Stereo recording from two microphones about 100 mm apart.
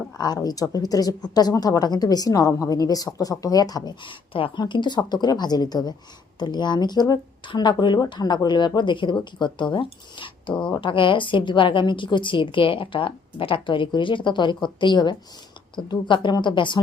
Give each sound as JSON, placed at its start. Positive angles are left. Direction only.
{"t": 0.3, "sound": "a woman's voice", "side_deg": 35}
{"t": 4.3, "sound": "speech", "side_deg": 60}
{"t": 4.6, "sound": "speech", "side_deg": 50}